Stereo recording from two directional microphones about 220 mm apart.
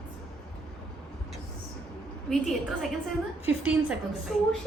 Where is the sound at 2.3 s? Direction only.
Centre (ahead or behind).